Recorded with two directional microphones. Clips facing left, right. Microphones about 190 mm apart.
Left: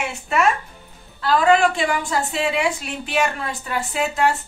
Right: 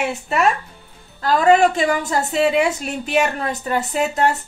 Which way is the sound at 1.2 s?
40° right (ahead or behind).